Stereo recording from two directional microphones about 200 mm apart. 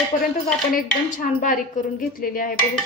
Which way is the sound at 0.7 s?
40° left (ahead or behind).